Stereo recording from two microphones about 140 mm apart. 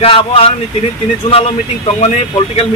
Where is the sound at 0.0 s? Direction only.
45° left (ahead or behind).